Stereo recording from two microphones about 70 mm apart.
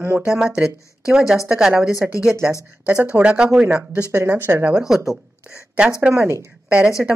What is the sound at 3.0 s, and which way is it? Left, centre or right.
Speech, centre.